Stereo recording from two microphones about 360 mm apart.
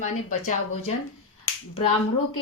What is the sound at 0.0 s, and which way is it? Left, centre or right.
Speech, centre.